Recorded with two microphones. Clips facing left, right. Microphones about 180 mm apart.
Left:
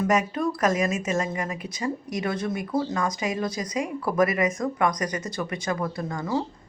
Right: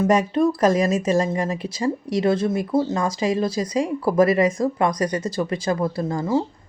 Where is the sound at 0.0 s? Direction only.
30° right (ahead or behind).